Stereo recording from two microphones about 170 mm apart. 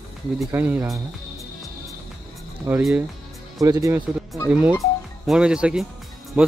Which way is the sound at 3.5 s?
20° right (ahead or behind).